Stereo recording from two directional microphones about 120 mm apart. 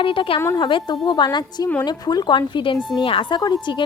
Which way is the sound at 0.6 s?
40° left (ahead or behind).